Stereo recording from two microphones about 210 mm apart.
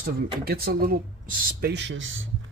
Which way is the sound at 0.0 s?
45° right (ahead or behind).